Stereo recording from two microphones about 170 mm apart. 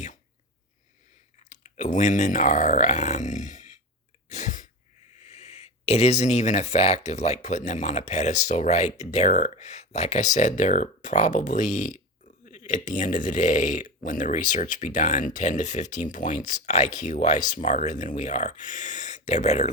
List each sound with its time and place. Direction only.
1.5 s speech: 45° left (ahead or behind)
4.3 s sneeze: 45° left (ahead or behind)
5.2 s speech: 40° left (ahead or behind)